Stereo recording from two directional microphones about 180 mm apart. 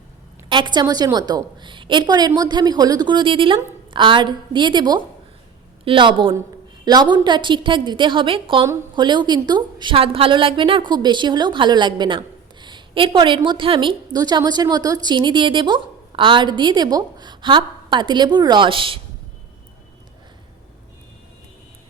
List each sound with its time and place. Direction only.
0.4 s a woman's voice: 25° right (ahead or behind)